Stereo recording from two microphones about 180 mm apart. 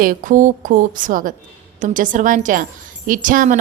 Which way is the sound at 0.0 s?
50° right (ahead or behind).